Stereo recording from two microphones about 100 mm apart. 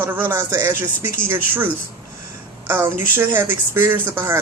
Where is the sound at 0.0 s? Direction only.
20° right (ahead or behind).